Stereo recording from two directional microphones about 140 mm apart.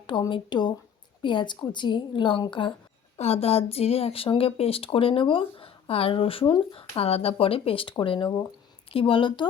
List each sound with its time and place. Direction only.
0.1 s speech: 35° left (ahead or behind)
3.2 s speech: 45° left (ahead or behind)